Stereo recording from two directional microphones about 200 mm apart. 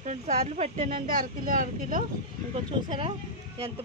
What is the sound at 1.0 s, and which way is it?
Speech, 45° right (ahead or behind).